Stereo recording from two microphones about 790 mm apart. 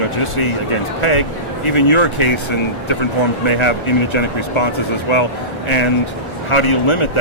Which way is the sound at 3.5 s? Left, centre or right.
Left.